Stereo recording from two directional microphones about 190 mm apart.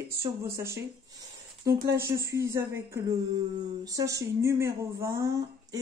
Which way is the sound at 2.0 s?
15° right (ahead or behind).